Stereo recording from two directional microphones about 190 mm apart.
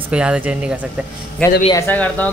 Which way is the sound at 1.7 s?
10° left (ahead or behind).